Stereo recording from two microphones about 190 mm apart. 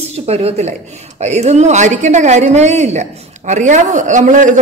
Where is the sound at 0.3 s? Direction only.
35° right (ahead or behind).